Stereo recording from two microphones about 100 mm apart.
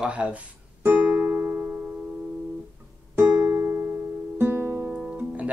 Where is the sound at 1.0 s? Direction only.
15° right (ahead or behind).